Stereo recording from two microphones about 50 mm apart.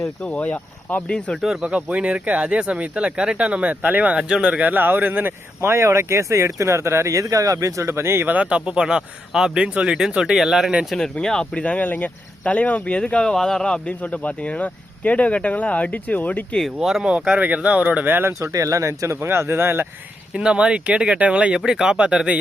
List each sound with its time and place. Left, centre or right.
0.3 s speech: left
1.0 s speech: centre
1.6 s speech: right
4.6 s speech: right
5.6 s speech: right
8.3 s speech: right; by 10.7 s centre
10.9 s speech: centre
11.5 s speech: left
16.8 s speech: centre
17.3 s speech: right
18.0 s speech: right
18.5 s speech: right
20.3 s speech: centre